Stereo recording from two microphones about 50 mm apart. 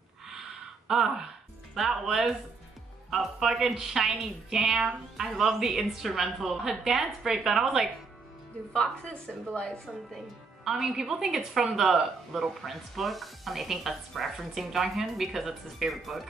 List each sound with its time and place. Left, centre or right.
0.3 s a sound: centre
1.8 s a woman's voice: centre
9.0 s a woman's voice: centre
10.6 s a woman's voice: centre